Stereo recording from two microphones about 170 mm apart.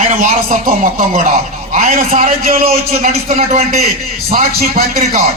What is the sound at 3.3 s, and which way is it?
Speech, 40° right (ahead or behind).